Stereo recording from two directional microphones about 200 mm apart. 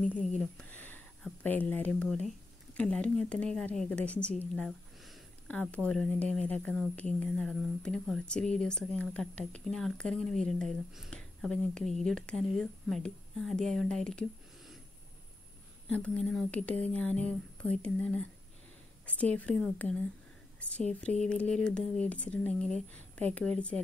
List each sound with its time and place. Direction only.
0.0 s a woman's voice: 5° left (ahead or behind)
15.9 s a woman's voice: 5° left (ahead or behind)
21.0 s speech: 5° left (ahead or behind)